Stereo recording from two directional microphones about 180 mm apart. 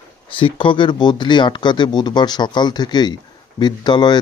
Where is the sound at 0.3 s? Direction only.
30° left (ahead or behind).